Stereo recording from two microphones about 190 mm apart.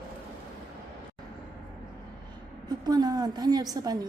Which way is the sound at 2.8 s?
20° right (ahead or behind).